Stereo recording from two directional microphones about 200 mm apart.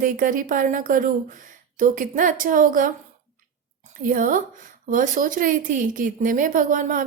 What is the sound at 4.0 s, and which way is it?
Speech, 40° right (ahead or behind).